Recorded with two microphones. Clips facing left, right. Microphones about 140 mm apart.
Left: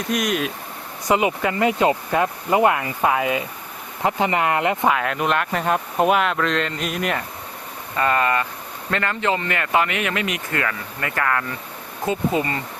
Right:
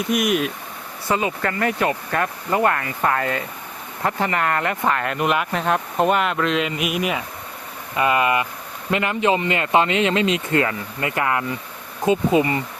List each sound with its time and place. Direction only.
0.1 s speech: 5° right (ahead or behind)
1.0 s speech: 15° left (ahead or behind)
4.9 s speech: centre (ahead or behind); by 12.6 s 15° right (ahead or behind)